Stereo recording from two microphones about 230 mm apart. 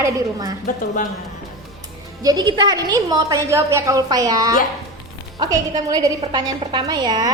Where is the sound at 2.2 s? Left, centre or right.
Centre.